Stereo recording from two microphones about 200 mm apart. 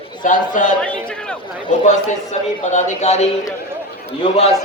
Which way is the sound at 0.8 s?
5° left (ahead or behind).